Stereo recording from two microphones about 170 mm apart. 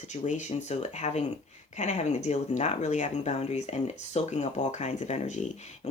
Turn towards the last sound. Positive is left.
turn(degrees=45)  # may be behind; listen again after turning